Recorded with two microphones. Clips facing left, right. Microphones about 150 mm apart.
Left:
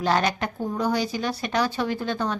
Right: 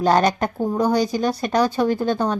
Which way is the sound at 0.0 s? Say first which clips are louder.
Right 6 dB; 45° right (ahead or behind).